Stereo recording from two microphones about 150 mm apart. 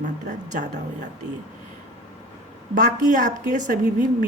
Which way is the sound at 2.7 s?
60° right (ahead or behind).